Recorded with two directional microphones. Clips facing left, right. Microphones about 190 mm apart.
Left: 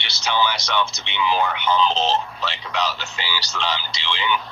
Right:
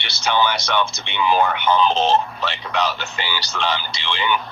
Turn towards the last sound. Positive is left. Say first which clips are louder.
# right 2 dB
turn(degrees=-55)  # may be behind; listen again after turning